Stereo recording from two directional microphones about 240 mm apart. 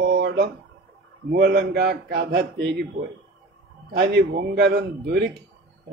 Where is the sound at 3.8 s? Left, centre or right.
Right.